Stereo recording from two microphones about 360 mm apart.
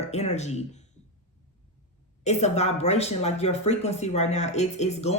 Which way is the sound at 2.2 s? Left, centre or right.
Centre.